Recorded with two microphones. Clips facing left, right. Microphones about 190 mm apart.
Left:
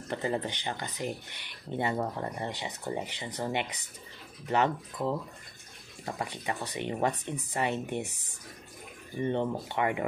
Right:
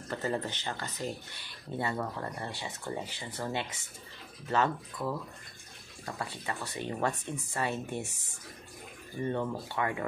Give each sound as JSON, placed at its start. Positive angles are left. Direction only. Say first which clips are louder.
{"t": 0.1, "sound": "speech", "louder": "left 2 dB", "side_deg": 15}
{"t": 9.2, "sound": "speech", "louder": "left 3 dB", "side_deg": 25}